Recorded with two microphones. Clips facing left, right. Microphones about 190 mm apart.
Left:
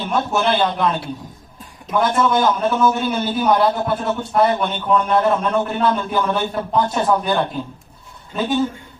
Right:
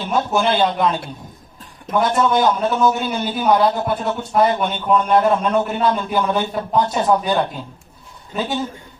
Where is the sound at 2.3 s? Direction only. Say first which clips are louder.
Even; 15° right (ahead or behind).